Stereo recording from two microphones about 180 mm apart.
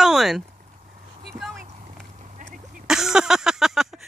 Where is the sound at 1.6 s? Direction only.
40° right (ahead or behind).